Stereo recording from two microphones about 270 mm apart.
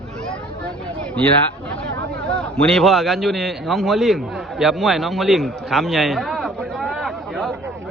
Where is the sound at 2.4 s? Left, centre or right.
Centre.